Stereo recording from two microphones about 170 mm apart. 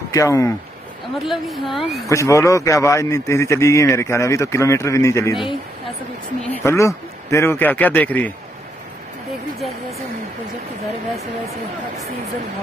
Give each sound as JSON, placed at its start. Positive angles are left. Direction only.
{"t": 0.1, "sound": "speech", "side_deg": 20}
{"t": 1.2, "sound": "a woman's voice", "side_deg": 0}
{"t": 2.0, "sound": "a man's voice", "side_deg": 20}
{"t": 5.3, "sound": "a woman's voice", "side_deg": 0}
{"t": 6.5, "sound": "a man's voice", "side_deg": 15}